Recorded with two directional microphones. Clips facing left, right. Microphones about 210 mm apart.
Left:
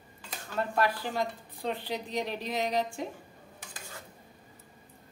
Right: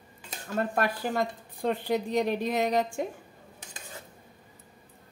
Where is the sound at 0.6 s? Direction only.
50° right (ahead or behind).